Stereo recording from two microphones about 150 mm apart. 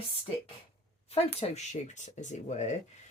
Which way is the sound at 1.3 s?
50° left (ahead or behind).